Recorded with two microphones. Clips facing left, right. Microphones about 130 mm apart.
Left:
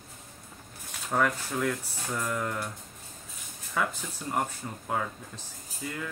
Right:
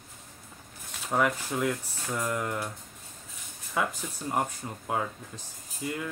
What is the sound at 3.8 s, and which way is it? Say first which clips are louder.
Speech: right 1 dB; 15° right (ahead or behind).